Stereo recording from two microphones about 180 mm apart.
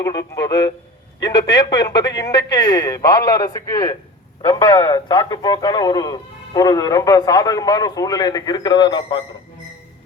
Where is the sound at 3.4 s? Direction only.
20° left (ahead or behind).